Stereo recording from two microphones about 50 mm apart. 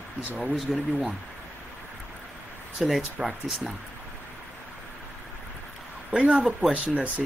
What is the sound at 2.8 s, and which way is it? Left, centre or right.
Speech, centre.